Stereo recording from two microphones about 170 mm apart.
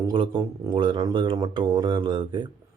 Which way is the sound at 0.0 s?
30° right (ahead or behind).